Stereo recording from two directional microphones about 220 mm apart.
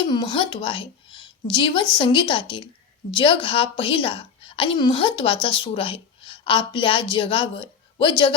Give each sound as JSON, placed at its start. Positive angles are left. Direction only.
{"t": 0.0, "sound": "a woman's voice", "side_deg": 20}